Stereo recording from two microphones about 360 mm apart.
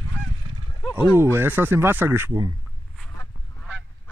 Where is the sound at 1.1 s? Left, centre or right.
Centre.